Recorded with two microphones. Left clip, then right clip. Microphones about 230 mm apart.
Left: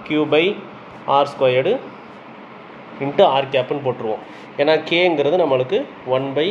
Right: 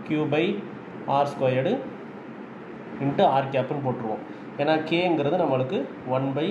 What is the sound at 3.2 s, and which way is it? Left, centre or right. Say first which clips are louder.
A man's voice: left 7 dB; left.